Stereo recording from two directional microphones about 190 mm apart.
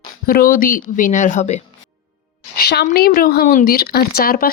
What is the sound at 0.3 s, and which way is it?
Speech, 50° left (ahead or behind).